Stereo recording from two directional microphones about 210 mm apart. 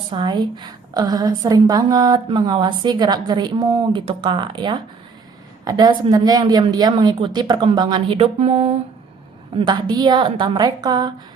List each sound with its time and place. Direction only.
0.1 s a woman's voice: 20° right (ahead or behind)